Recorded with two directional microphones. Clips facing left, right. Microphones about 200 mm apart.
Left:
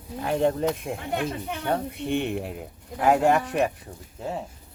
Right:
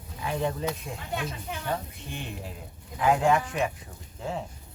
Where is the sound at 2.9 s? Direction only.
55° left (ahead or behind).